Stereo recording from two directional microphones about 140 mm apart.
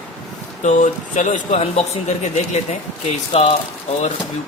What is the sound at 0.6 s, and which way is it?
Speech, 60° left (ahead or behind).